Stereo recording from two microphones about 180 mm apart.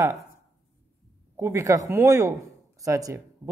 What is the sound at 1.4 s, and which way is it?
Speech, 15° right (ahead or behind).